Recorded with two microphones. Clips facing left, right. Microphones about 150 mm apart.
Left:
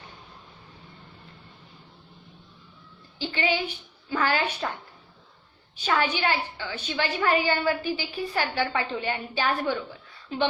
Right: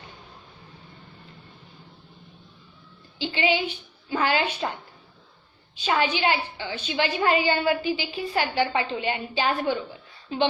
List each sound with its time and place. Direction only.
3.2 s a woman's voice: 20° right (ahead or behind)
5.8 s a woman's voice: 20° right (ahead or behind)